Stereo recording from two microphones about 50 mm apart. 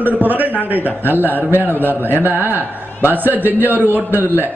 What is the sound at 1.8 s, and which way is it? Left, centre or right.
Speech, left.